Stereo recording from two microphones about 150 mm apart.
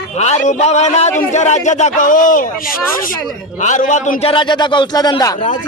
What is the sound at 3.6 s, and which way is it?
Speech, 55° left (ahead or behind).